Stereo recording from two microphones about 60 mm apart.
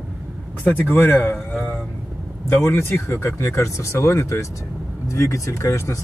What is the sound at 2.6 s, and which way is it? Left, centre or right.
Speech, left.